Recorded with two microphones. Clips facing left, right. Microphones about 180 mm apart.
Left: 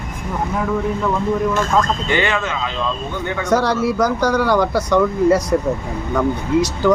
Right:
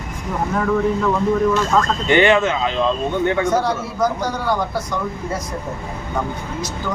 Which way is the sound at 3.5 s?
75° left (ahead or behind).